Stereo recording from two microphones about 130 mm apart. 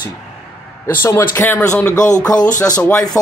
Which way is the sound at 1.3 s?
15° left (ahead or behind).